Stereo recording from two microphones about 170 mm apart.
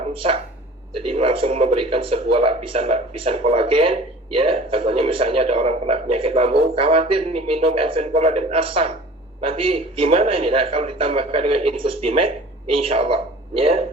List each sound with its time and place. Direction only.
0.1 s a man's voice: 30° right (ahead or behind)